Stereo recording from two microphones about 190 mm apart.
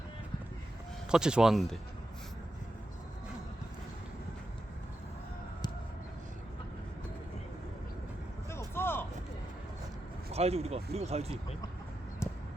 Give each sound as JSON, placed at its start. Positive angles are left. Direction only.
{"t": 1.1, "sound": "speech", "side_deg": -5}
{"t": 8.4, "sound": "a sound", "side_deg": 15}
{"t": 10.3, "sound": "speech", "side_deg": -35}
{"t": 12.2, "sound": "clip-clop", "side_deg": 15}